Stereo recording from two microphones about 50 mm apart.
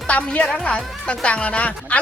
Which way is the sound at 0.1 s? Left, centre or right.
Left.